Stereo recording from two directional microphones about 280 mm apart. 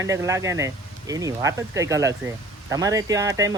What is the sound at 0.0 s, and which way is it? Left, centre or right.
Speech, centre.